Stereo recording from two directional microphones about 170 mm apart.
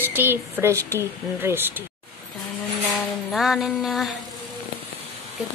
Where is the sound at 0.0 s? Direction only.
10° right (ahead or behind).